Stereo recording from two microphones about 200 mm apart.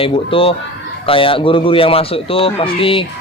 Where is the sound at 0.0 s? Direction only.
25° left (ahead or behind).